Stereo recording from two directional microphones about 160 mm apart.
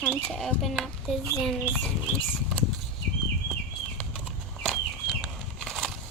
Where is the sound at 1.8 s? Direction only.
5° left (ahead or behind).